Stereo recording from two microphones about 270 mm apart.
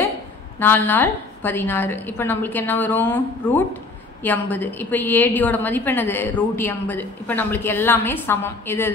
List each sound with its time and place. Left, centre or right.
0.6 s a woman's voice: centre